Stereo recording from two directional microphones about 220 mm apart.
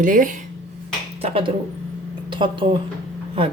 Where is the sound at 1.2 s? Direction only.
25° right (ahead or behind).